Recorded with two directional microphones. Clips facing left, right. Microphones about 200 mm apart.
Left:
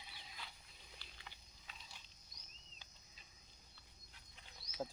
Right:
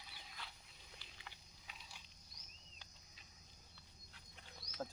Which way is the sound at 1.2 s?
5° right (ahead or behind).